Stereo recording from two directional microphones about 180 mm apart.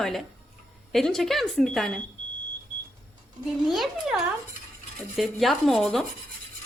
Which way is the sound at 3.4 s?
Centre (ahead or behind).